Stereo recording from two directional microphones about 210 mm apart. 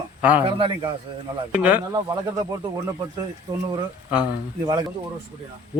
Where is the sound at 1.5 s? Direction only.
5° right (ahead or behind).